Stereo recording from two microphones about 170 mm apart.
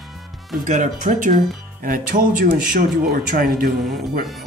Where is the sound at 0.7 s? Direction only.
50° right (ahead or behind).